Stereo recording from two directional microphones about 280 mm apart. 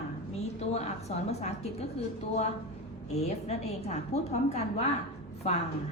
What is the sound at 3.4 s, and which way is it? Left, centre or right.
A woman's voice, left.